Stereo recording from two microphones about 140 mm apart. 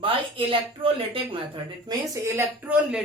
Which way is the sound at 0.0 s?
40° right (ahead or behind).